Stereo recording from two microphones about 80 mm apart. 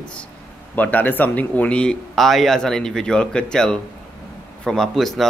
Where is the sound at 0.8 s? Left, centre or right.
Left.